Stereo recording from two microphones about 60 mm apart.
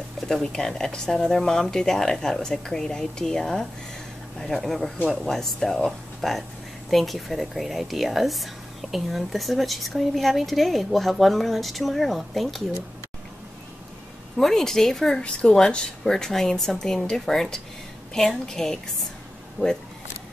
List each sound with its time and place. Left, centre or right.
0.3 s speech: centre
14.4 s speech: centre
19.6 s speech: left